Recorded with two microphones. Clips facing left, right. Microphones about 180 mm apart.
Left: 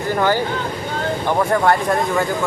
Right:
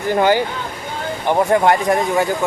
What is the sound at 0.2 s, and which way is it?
Speech, 15° right (ahead or behind).